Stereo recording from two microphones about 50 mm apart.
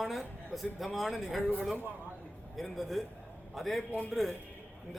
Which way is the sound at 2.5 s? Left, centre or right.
Centre.